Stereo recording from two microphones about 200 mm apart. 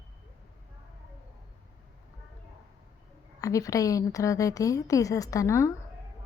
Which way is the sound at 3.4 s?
15° left (ahead or behind).